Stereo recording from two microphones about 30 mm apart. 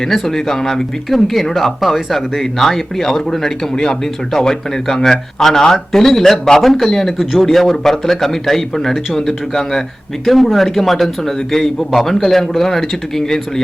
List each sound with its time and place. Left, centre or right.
0.0 s a man's voice: centre
10.2 s a man's voice: centre